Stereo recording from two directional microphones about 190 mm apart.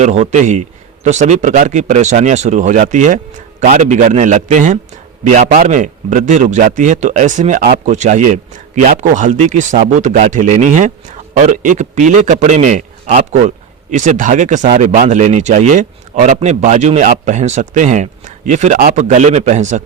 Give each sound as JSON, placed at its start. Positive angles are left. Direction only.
{"t": 0.0, "sound": "speech", "side_deg": -40}